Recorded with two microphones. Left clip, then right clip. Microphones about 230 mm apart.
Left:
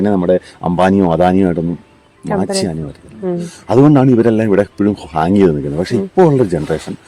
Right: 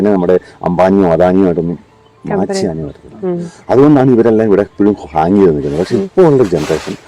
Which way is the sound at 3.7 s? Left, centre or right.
Left.